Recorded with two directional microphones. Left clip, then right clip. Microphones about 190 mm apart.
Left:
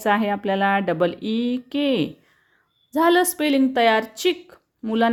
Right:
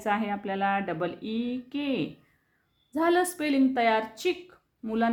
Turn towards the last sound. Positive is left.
turn(degrees=35)  # may be behind; listen again after turning